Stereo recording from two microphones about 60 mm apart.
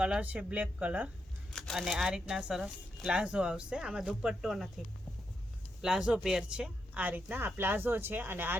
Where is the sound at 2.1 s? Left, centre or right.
Centre.